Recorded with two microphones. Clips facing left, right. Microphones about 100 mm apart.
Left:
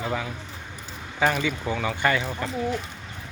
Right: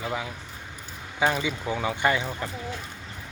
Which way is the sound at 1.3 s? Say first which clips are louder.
Left 1 dB; 15° right (ahead or behind).